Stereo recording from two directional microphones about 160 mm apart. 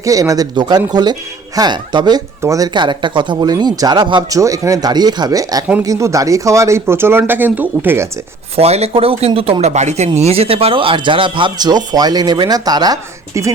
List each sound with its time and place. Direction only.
0.0 s speech: 20° right (ahead or behind)
8.5 s speech: 40° right (ahead or behind); by 13.5 s 20° right (ahead or behind)